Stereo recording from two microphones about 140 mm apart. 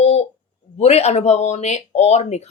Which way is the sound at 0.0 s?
50° left (ahead or behind).